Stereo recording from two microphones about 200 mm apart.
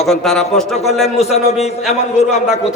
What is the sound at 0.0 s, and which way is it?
Speech, centre (ahead or behind).